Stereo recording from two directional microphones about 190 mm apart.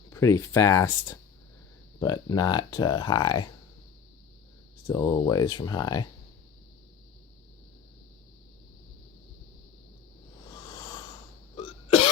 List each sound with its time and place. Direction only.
0.1 s speech: 15° left (ahead or behind)
2.0 s speech: 20° left (ahead or behind)
4.9 s speech: 20° left (ahead or behind)
10.7 s a sound: 20° left (ahead or behind)
11.5 s cough: 30° left (ahead or behind)